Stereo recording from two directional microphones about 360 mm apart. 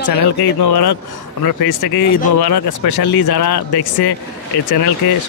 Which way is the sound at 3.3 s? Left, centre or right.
Left.